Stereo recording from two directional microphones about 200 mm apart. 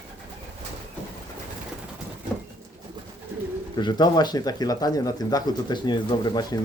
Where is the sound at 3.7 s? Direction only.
20° left (ahead or behind).